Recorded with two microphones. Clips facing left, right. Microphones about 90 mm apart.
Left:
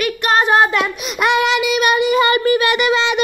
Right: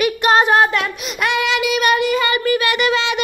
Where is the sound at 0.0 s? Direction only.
15° right (ahead or behind).